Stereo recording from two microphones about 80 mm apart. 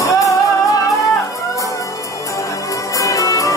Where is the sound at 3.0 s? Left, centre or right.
Left.